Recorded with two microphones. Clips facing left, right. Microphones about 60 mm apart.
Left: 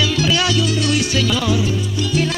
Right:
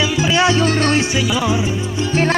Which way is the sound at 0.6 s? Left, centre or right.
Right.